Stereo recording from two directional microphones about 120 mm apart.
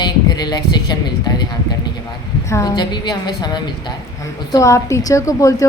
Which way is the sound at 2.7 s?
35° left (ahead or behind).